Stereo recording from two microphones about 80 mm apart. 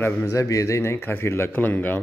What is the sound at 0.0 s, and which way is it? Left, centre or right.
Speech, left.